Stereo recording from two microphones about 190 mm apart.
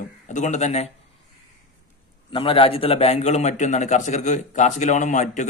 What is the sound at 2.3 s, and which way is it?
A man's voice, 30° left (ahead or behind).